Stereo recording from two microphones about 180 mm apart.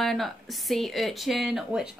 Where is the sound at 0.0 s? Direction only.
Centre (ahead or behind).